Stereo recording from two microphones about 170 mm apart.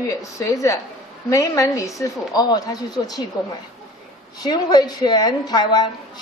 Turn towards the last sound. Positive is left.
turn(degrees=25)  # may be behind; listen again after turning